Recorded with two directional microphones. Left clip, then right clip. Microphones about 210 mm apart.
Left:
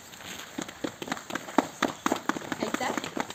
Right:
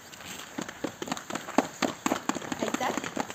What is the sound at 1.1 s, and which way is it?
Run, 55° right (ahead or behind).